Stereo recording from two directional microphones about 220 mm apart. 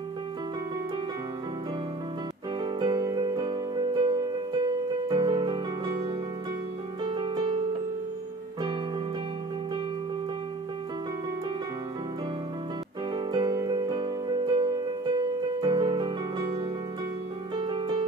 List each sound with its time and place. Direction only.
2.6 s music: 20° right (ahead or behind)
7.1 s music: 20° right (ahead or behind)
13.1 s music: 20° right (ahead or behind)
17.6 s music: 20° right (ahead or behind)